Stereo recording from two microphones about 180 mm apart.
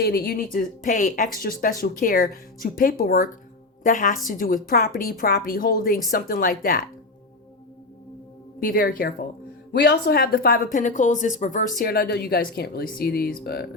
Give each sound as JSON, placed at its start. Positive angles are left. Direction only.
{"t": 0.0, "sound": "speech", "side_deg": 55}
{"t": 8.6, "sound": "speech", "side_deg": 55}